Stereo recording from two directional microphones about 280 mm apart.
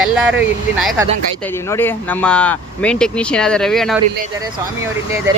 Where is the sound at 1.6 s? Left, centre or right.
Centre.